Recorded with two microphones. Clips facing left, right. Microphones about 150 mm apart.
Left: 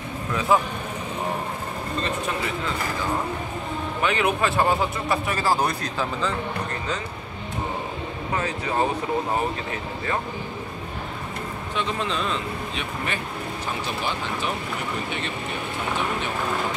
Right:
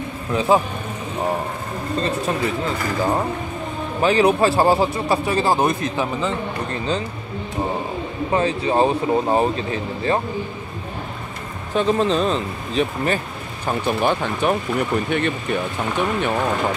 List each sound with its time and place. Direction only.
0.3 s speech: 25° right (ahead or behind)
2.0 s speech: 40° right (ahead or behind); by 6.3 s 20° right (ahead or behind)
8.3 s speech: 25° right (ahead or behind)
11.7 s speech: 40° right (ahead or behind)
13.7 s speech: 55° right (ahead or behind)